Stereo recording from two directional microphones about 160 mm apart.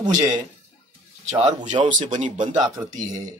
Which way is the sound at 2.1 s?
50° right (ahead or behind).